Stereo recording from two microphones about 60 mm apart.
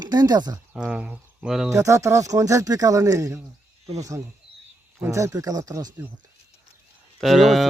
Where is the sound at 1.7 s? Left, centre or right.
Right.